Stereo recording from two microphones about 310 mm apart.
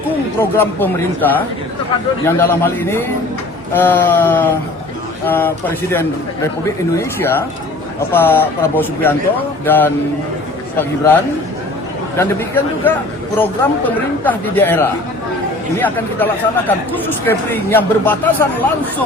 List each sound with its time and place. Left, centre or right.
0.5 s speech: centre